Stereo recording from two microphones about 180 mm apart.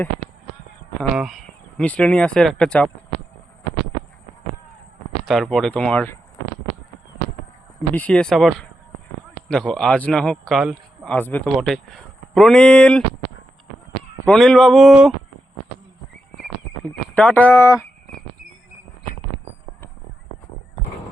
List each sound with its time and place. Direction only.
1.1 s a man's voice: 5° right (ahead or behind)
1.8 s speech: 10° left (ahead or behind)
5.2 s a man's voice: centre (ahead or behind)
7.9 s a man's voice: 5° left (ahead or behind)
14.3 s a man's voice: centre (ahead or behind)
16.4 s livestock: 5° left (ahead or behind)